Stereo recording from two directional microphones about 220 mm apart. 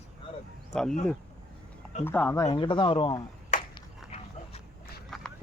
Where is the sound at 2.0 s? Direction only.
10° left (ahead or behind).